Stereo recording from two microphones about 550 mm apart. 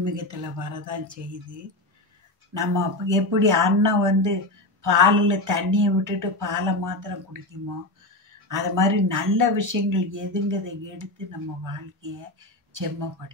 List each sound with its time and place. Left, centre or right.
0.0 s speech: right
2.5 s speech: right
8.5 s speech: right